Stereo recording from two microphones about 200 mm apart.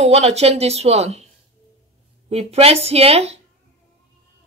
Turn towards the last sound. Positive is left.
turn(degrees=-30)  # may be behind; listen again after turning